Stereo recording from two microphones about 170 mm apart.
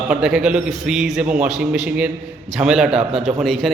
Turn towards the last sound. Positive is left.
turn(degrees=0)  # may be behind; listen again after turning